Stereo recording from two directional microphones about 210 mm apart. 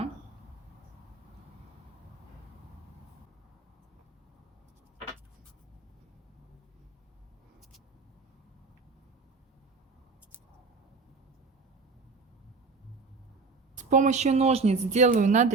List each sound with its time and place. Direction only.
13.7 s speech: 35° right (ahead or behind)